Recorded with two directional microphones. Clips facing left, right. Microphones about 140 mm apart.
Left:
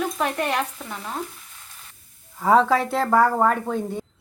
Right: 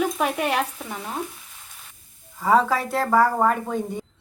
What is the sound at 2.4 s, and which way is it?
Speech, 5° right (ahead or behind).